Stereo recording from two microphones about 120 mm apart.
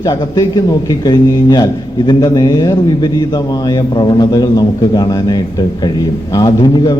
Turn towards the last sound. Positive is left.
turn(degrees=35)  # may be behind; listen again after turning